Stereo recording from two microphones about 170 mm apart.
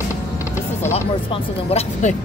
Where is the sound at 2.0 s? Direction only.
45° left (ahead or behind).